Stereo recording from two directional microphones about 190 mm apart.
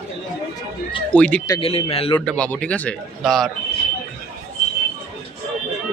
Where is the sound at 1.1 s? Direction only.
5° left (ahead or behind).